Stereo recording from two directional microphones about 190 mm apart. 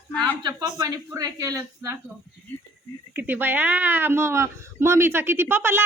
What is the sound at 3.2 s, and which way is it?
A woman's voice, 10° right (ahead or behind).